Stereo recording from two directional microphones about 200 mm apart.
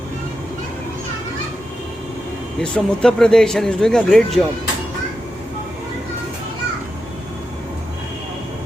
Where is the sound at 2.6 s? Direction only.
5° left (ahead or behind).